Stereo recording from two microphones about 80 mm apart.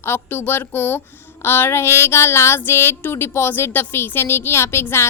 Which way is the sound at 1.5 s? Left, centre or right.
Left.